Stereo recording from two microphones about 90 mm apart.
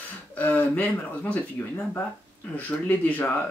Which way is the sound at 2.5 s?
20° left (ahead or behind).